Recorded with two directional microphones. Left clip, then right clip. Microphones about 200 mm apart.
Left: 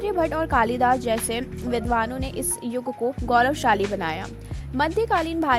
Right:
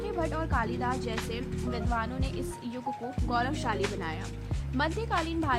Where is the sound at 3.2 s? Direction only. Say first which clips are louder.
Left 11 dB; 35° left (ahead or behind).